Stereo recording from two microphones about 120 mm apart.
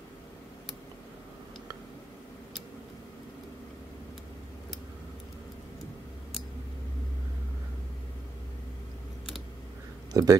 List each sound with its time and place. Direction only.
10.1 s speech: 30° right (ahead or behind)